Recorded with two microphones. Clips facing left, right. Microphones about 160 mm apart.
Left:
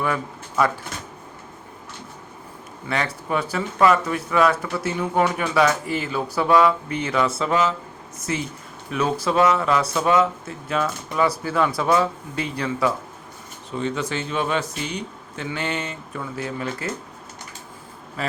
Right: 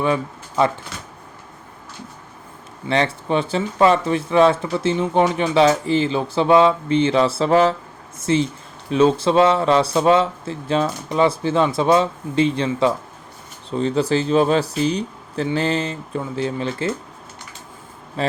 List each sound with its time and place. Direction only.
0.0 s speech: 25° right (ahead or behind)
2.9 s speech: 25° right (ahead or behind)
18.2 s speech: 25° right (ahead or behind)